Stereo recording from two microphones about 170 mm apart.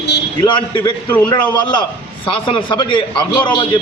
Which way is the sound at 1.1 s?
15° left (ahead or behind).